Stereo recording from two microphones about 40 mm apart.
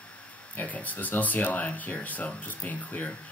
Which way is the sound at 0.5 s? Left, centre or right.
Left.